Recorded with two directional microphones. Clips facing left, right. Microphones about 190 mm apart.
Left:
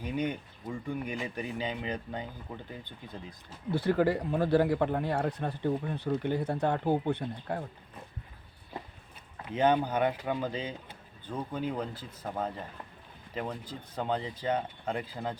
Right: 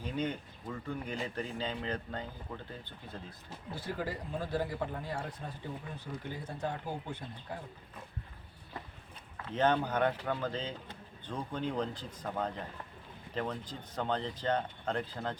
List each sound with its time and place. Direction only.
0.0 s speech: 15° left (ahead or behind)
3.7 s speech: 65° left (ahead or behind)
9.4 s speech: 10° left (ahead or behind)